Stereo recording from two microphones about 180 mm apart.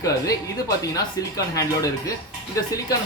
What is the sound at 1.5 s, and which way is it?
Speech, 20° left (ahead or behind).